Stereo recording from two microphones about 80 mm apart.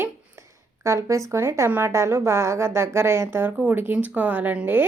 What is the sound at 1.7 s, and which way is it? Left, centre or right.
A woman's voice, right.